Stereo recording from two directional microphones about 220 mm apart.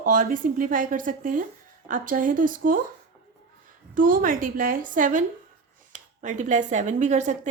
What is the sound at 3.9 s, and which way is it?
Speech, 40° right (ahead or behind).